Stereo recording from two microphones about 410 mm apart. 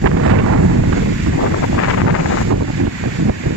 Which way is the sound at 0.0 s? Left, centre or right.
Right.